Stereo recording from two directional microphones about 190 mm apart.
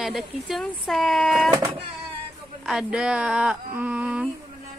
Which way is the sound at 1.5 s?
15° right (ahead or behind).